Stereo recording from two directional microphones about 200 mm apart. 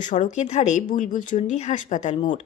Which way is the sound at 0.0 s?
40° left (ahead or behind).